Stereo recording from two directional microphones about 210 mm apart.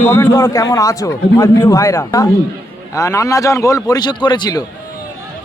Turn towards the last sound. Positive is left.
turn(degrees=20)  # may be behind; listen again after turning